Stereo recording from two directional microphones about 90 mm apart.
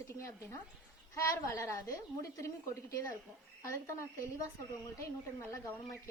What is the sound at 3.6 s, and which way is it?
Speech, 35° left (ahead or behind).